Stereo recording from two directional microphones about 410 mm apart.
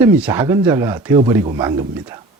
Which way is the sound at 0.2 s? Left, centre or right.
Centre.